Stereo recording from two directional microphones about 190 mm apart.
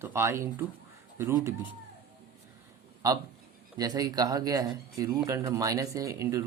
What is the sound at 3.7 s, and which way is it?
Speech, 20° right (ahead or behind).